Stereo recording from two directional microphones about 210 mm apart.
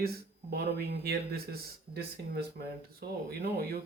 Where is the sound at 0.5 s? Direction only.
50° right (ahead or behind).